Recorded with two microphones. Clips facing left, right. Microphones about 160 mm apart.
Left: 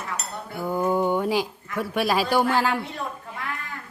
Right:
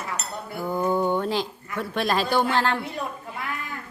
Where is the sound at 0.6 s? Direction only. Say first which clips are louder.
Left 1 dB; 10° left (ahead or behind).